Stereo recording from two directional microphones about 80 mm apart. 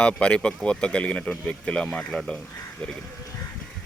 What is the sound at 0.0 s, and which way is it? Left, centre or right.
Speech, centre.